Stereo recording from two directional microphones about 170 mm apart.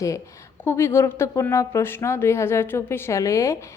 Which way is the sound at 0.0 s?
20° left (ahead or behind).